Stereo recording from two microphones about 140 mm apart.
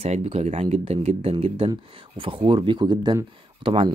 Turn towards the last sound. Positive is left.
turn(degrees=-40)  # may be behind; listen again after turning